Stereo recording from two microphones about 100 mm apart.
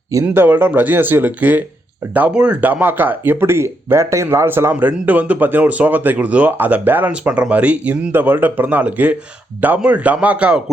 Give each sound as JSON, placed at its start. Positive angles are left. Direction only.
{"t": 0.3, "sound": "speech", "side_deg": -20}